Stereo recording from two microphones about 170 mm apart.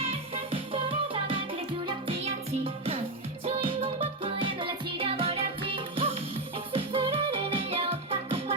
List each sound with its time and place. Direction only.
0.0 s music: 35° right (ahead or behind)